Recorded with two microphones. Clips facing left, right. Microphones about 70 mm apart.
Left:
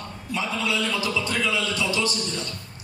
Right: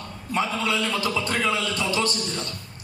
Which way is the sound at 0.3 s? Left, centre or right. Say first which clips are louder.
Right 2 dB; right.